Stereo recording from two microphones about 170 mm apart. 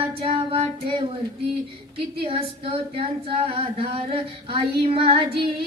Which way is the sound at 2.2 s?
35° right (ahead or behind).